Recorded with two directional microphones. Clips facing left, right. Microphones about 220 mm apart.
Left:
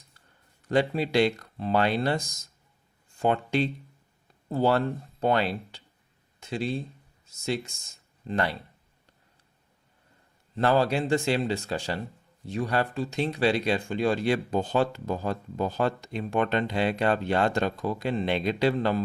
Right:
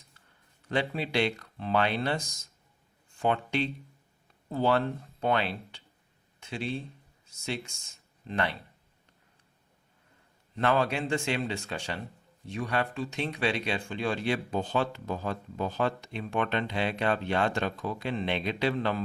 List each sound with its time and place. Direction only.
0.7 s speech: 40° left (ahead or behind)
3.2 s speech: 40° left (ahead or behind)
8.3 s speech: 40° left (ahead or behind)
10.5 s speech: 35° left (ahead or behind)